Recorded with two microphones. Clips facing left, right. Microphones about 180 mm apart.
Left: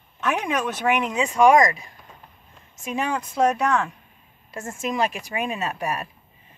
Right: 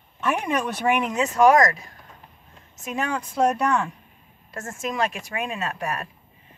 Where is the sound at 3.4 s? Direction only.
Centre (ahead or behind).